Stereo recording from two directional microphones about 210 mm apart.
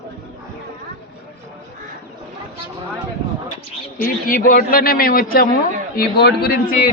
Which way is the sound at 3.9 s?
45° left (ahead or behind).